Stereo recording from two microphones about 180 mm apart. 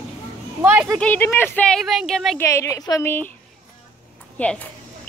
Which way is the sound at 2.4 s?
15° left (ahead or behind).